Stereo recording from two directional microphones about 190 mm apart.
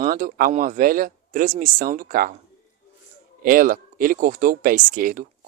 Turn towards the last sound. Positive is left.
turn(degrees=-45)  # may be behind; listen again after turning